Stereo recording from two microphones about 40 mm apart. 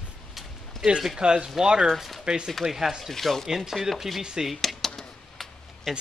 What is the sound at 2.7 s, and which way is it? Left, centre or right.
Speech, centre.